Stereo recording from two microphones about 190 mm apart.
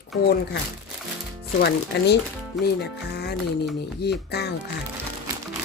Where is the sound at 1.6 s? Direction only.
65° left (ahead or behind).